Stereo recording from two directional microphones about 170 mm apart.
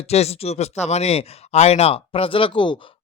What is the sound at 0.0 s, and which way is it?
Speech, 40° left (ahead or behind).